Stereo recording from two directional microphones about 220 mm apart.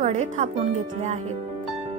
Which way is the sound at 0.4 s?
30° right (ahead or behind).